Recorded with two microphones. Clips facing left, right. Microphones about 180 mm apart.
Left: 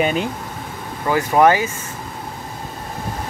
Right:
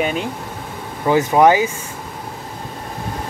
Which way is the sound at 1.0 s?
15° right (ahead or behind).